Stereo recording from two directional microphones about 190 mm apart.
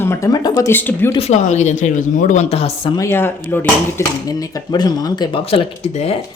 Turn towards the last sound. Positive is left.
turn(degrees=30)  # may be behind; listen again after turning